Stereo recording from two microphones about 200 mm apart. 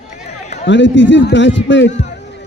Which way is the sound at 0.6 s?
65° left (ahead or behind).